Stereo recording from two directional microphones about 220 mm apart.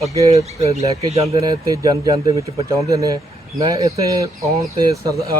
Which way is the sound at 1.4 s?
15° right (ahead or behind).